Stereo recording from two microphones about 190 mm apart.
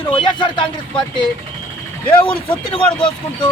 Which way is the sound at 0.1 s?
25° left (ahead or behind).